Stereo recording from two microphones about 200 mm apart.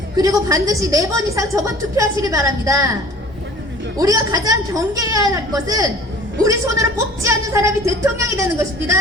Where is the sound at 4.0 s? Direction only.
20° right (ahead or behind).